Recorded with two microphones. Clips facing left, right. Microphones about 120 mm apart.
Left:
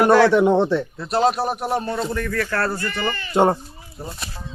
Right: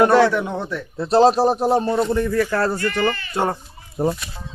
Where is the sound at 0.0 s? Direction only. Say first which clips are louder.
Even; 25° right (ahead or behind).